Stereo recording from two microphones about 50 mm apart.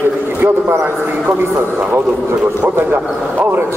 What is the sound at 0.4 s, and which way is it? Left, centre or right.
A man's voice, right.